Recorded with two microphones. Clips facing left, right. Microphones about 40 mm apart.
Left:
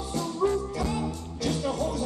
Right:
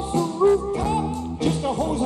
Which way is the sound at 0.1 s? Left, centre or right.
Right.